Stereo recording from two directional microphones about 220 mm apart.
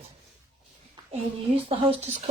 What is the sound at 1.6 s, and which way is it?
Speech, 25° right (ahead or behind).